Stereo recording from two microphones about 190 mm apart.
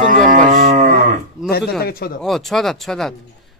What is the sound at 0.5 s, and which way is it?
Livestock, 40° right (ahead or behind).